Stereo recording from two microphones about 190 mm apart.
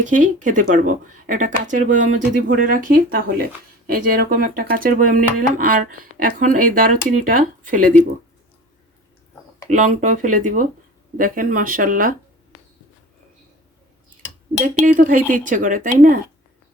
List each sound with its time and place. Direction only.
0.0 s speech: 40° right (ahead or behind)
9.6 s speech: 45° right (ahead or behind)
14.6 s speech: 45° right (ahead or behind)